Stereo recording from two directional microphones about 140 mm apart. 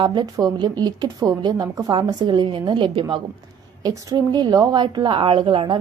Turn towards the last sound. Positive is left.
turn(degrees=-35)  # may be behind; listen again after turning